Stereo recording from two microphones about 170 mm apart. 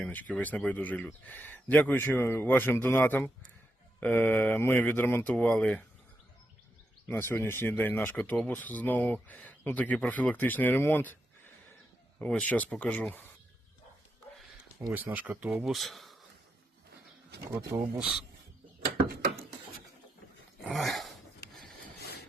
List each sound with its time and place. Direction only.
0.0 s speech: 10° left (ahead or behind)
7.1 s speech: 10° left (ahead or behind)
12.2 s speech: 10° left (ahead or behind)
14.8 s speech: 10° right (ahead or behind)
17.7 s speech: 10° right (ahead or behind)
18.9 s a sound: 60° right (ahead or behind)
20.7 s dog: centre (ahead or behind)